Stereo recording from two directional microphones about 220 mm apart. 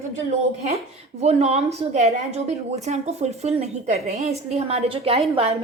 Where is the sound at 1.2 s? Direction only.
30° right (ahead or behind).